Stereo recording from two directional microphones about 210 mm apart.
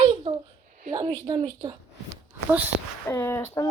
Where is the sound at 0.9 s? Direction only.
20° right (ahead or behind).